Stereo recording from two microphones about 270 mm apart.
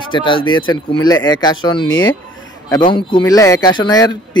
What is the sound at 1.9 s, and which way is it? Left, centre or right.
Speech, left.